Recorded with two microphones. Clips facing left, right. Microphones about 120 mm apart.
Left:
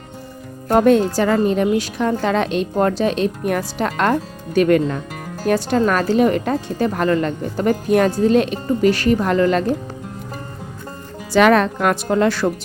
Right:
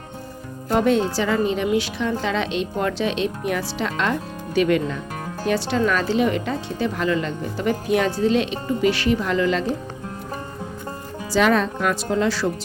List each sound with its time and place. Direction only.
0.7 s a woman's voice: 50° left (ahead or behind)
11.3 s speech: 65° left (ahead or behind)